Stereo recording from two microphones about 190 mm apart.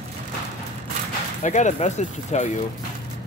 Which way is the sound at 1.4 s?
40° left (ahead or behind).